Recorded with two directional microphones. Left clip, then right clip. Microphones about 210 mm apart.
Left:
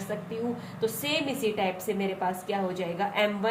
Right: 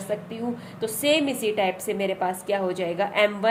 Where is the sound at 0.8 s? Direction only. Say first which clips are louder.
Right 7 dB; 55° right (ahead or behind).